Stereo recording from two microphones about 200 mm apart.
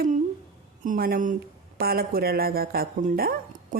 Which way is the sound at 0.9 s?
45° right (ahead or behind).